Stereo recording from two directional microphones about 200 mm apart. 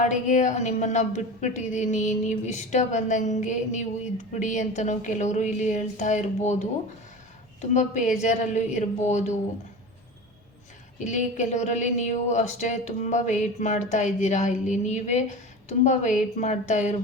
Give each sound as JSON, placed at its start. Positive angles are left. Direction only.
{"t": 0.0, "sound": "a woman's voice", "side_deg": 35}
{"t": 7.7, "sound": "a woman's voice", "side_deg": 35}
{"t": 11.0, "sound": "a woman's voice", "side_deg": 35}